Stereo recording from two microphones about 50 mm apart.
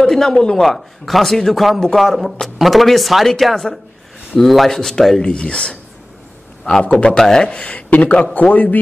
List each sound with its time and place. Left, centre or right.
0.0 s speech: centre
0.6 s speech: centre
5.2 s a man's voice: centre
6.9 s a man's voice: left
7.2 s speech: centre
7.6 s a man's voice: left